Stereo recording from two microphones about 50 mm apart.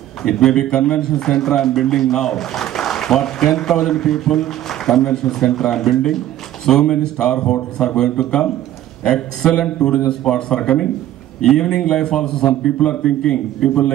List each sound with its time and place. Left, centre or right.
0.2 s a man's voice: centre